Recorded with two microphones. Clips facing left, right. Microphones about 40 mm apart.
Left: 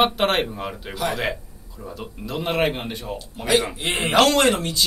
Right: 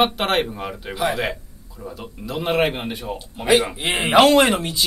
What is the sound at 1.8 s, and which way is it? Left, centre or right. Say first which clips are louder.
Speech: right 1 dB; centre.